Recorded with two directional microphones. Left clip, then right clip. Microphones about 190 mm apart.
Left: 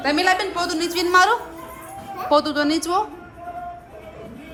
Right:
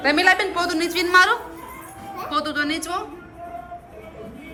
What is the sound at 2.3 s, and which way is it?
Speech, 30° left (ahead or behind).